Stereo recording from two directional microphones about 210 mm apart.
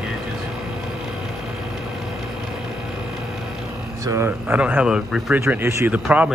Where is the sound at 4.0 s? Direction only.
15° right (ahead or behind).